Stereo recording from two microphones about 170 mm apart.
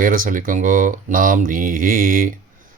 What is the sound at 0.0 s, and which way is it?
Speech, 55° right (ahead or behind).